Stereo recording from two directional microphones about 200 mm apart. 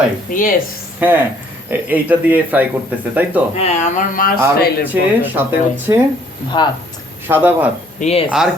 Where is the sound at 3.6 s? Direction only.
35° left (ahead or behind).